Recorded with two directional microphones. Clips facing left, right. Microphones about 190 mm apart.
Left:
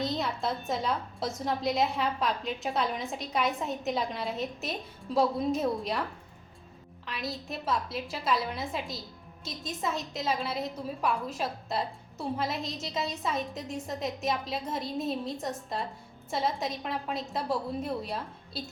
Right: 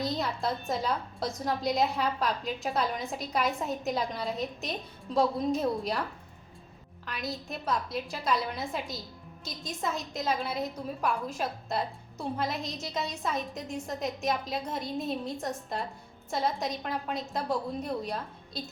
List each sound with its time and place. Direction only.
0.0 s a woman's voice: centre (ahead or behind)
7.0 s a woman's voice: centre (ahead or behind)